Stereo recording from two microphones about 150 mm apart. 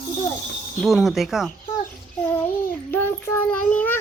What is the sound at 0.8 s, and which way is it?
Speech, centre (ahead or behind).